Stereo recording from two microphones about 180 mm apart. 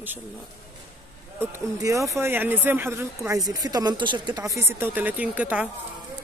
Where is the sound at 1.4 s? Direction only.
15° right (ahead or behind).